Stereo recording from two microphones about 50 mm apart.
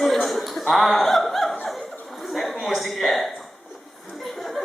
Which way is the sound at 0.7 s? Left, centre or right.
Centre.